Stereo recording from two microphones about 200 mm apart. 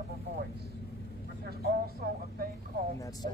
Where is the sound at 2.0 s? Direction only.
50° right (ahead or behind).